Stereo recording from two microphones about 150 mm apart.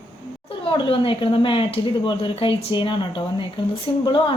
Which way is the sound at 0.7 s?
35° left (ahead or behind).